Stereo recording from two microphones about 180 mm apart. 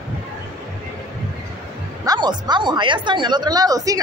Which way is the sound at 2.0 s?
20° right (ahead or behind).